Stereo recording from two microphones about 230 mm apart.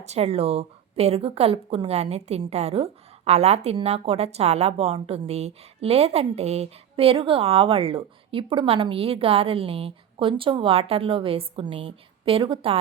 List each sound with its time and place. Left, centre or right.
0.0 s a woman's voice: right